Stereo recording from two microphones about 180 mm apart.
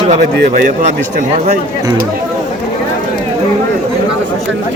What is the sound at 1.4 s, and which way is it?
Speech, 50° right (ahead or behind).